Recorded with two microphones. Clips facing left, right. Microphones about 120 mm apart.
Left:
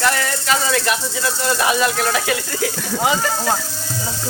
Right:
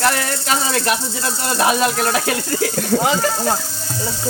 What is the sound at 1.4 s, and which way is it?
Speech, 40° right (ahead or behind).